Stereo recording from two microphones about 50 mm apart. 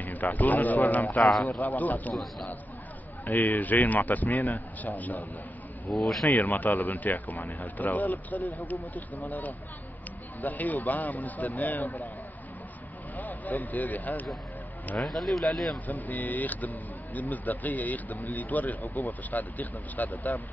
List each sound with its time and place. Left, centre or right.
0.0 s speech: left
1.2 s speech: centre
1.6 s speech: left
3.3 s speech: left
13.1 s speech: left
15.0 s speech: centre
15.9 s speech: left